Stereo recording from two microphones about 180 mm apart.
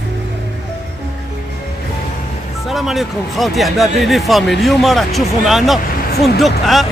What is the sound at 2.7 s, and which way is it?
Speech, centre (ahead or behind).